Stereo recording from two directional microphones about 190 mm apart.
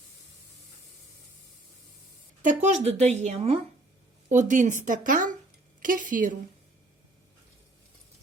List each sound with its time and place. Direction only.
2.4 s speech: 40° right (ahead or behind)